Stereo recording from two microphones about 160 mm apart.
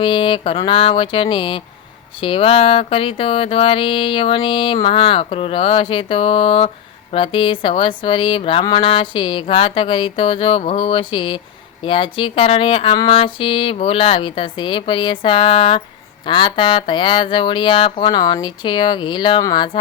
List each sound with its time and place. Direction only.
0.0 s music: 30° left (ahead or behind)
16.2 s speech: 30° left (ahead or behind)